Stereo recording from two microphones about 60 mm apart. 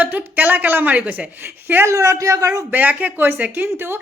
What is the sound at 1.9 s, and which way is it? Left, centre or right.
Speech, right.